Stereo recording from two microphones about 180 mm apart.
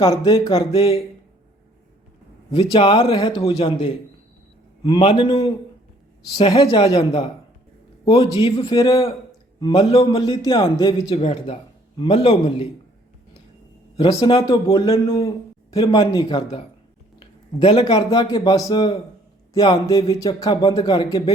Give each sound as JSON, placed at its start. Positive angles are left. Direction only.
{"t": 0.0, "sound": "a man's voice", "side_deg": 20}
{"t": 0.5, "sound": "a man's voice", "side_deg": 30}
{"t": 2.5, "sound": "a man's voice", "side_deg": 25}
{"t": 11.1, "sound": "a man's voice", "side_deg": 35}
{"t": 13.9, "sound": "speech", "side_deg": 35}
{"t": 14.2, "sound": "a man's voice", "side_deg": 25}